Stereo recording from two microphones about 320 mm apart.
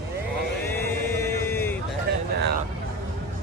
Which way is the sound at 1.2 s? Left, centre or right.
Centre.